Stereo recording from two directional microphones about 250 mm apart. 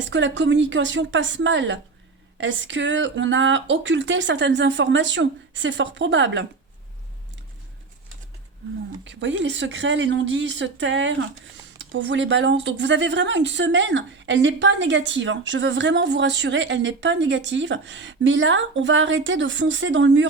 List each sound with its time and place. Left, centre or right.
0.0 s speech: right
9.0 s speech: right